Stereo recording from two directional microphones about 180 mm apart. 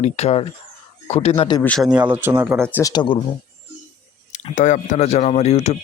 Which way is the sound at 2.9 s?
25° left (ahead or behind).